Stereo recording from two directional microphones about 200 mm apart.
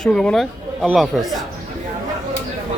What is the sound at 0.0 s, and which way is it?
A man's voice, 5° left (ahead or behind).